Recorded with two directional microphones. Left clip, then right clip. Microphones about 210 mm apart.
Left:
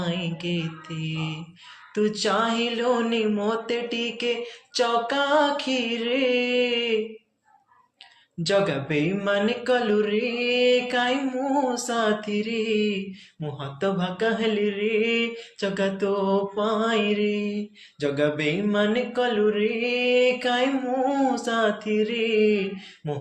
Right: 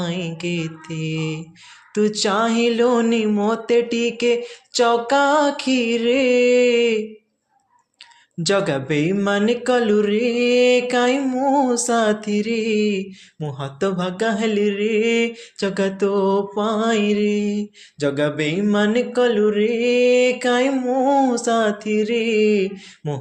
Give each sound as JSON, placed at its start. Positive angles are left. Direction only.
{"t": 0.0, "sound": "mantra", "side_deg": -50}
{"t": 8.4, "sound": "mantra", "side_deg": -55}